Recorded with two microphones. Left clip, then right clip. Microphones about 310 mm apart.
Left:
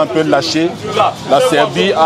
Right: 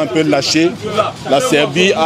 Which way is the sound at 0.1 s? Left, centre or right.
Left.